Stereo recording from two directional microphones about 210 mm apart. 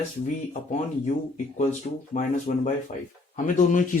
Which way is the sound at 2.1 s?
35° left (ahead or behind).